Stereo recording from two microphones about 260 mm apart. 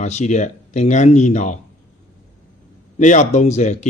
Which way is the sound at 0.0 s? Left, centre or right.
Left.